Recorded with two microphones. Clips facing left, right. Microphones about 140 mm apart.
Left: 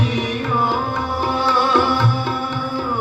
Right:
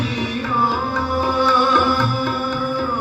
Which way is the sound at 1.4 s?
30° left (ahead or behind).